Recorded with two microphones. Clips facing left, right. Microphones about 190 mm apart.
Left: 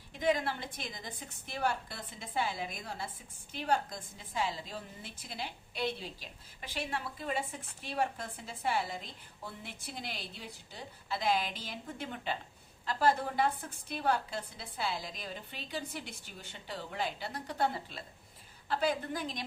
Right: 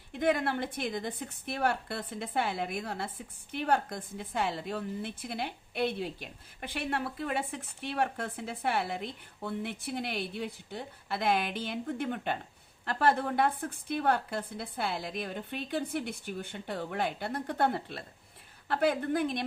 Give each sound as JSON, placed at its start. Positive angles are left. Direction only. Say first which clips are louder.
{"t": 0.1, "sound": "a woman's voice", "louder": "right 3 dB", "side_deg": -60}